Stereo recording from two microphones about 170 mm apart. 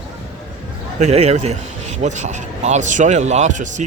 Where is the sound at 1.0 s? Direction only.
40° right (ahead or behind).